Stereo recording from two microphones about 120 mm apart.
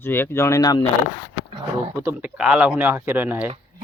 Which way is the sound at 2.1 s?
10° right (ahead or behind).